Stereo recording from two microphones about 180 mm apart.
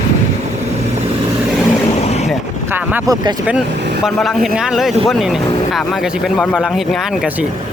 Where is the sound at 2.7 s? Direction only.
10° right (ahead or behind).